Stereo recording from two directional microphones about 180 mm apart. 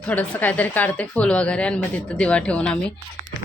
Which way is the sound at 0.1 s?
10° left (ahead or behind).